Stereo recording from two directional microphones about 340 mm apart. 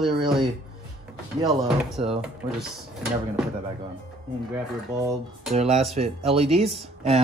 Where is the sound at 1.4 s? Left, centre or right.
Centre.